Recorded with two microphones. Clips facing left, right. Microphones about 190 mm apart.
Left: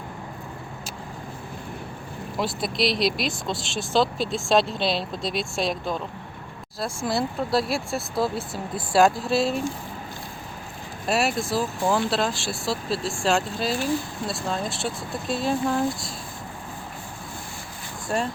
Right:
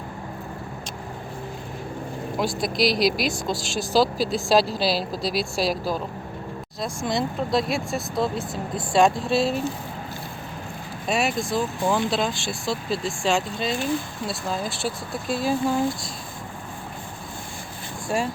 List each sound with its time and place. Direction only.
2.4 s speech: centre (ahead or behind)
7.0 s speech: 5° left (ahead or behind)
11.0 s speech: centre (ahead or behind)
18.1 s speech: 5° right (ahead or behind)